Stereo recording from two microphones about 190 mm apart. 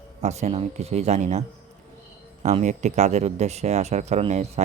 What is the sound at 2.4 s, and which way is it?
Speech, 35° right (ahead or behind).